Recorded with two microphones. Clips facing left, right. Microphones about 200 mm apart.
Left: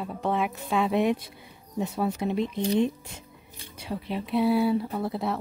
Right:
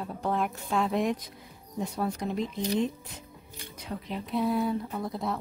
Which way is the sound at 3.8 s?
10° left (ahead or behind).